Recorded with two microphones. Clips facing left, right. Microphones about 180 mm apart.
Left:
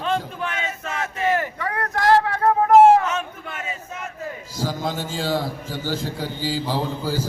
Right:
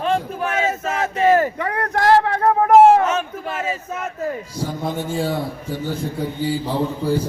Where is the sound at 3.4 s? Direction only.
70° right (ahead or behind).